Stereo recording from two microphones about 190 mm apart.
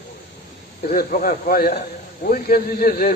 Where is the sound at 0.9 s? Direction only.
50° left (ahead or behind).